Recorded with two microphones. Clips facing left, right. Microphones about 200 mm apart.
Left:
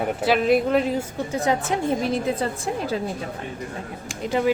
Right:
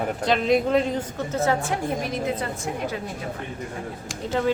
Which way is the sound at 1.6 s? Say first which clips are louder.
Left 4 dB; 30° left (ahead or behind).